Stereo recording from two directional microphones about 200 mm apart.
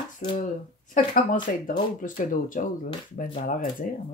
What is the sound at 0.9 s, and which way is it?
Speech, 45° left (ahead or behind).